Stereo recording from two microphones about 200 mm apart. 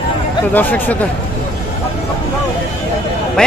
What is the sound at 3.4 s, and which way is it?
Speech, 5° left (ahead or behind).